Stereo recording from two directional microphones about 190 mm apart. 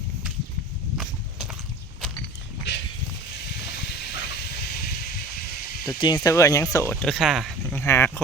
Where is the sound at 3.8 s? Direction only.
60° left (ahead or behind).